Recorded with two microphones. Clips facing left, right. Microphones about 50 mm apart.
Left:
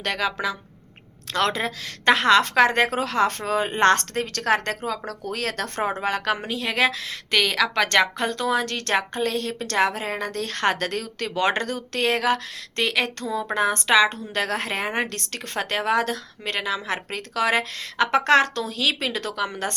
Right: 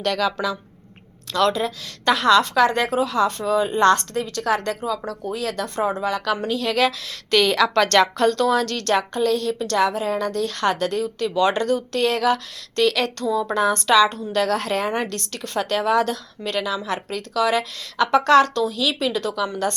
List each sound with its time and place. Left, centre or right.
0.0 s speech: left
1.3 s a woman's voice: left
6.4 s speech: left
7.3 s a woman's voice: centre; by 11.3 s left
11.3 s a woman's voice: left